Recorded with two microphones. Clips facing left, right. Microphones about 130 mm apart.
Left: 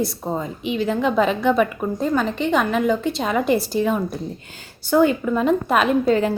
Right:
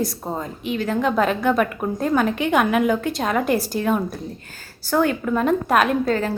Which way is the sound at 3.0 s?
50° right (ahead or behind).